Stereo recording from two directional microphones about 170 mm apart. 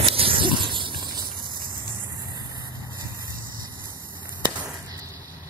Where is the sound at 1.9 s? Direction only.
20° right (ahead or behind).